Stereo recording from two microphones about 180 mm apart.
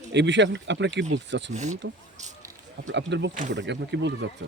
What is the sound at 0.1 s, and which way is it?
Speech, 80° right.